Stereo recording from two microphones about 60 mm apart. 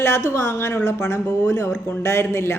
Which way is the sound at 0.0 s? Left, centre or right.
Left.